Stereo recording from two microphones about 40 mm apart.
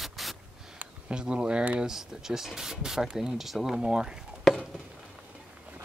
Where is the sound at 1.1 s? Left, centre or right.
Right.